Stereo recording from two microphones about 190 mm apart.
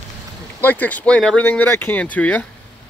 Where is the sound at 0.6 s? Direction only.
10° left (ahead or behind).